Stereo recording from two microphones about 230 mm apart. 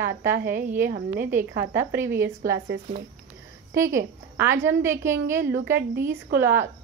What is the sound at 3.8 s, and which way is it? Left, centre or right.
A woman's voice, centre.